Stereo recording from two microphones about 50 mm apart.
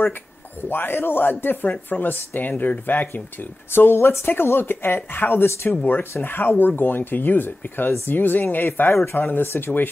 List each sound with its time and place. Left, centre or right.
0.6 s speech: left